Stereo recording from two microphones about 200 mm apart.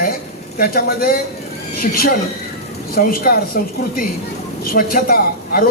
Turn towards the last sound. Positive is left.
turn(degrees=45)  # may be behind; listen again after turning